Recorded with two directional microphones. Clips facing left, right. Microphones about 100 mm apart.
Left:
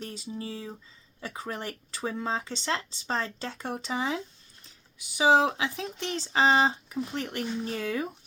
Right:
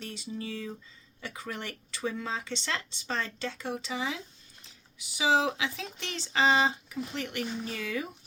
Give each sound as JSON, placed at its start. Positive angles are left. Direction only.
{"t": 0.0, "sound": "speech", "side_deg": 35}
{"t": 4.6, "sound": "typing", "side_deg": 45}
{"t": 5.5, "sound": "speech", "side_deg": 30}